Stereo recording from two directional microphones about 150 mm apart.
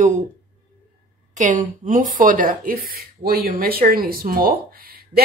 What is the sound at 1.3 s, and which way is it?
Speech, 60° right (ahead or behind).